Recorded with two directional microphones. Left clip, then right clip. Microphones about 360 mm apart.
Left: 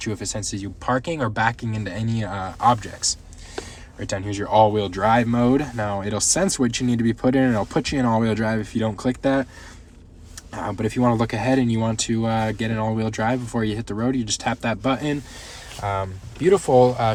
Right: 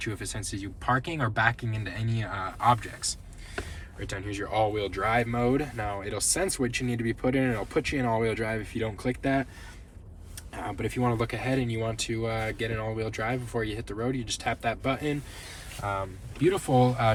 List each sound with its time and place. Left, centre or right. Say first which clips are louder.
0.0 s speech: left 7 dB; centre
10.5 s speech: left 7 dB; centre
16.7 s speech: left 8 dB; centre